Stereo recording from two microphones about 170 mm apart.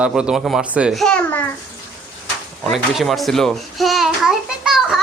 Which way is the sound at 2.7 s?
Centre (ahead or behind).